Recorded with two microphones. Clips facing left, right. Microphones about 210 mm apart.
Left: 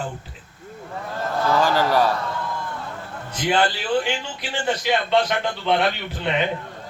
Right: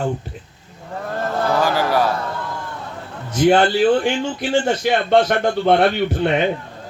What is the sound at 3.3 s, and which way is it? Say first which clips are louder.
A man's voice: right 8 dB; 45° right (ahead or behind).